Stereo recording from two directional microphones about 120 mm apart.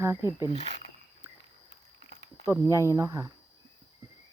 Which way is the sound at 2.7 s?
25° right (ahead or behind).